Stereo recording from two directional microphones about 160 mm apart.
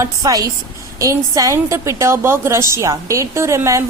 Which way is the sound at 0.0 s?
20° right (ahead or behind).